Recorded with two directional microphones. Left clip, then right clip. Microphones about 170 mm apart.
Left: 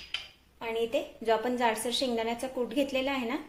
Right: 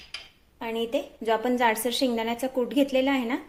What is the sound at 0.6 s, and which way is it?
A woman's voice, 40° right (ahead or behind).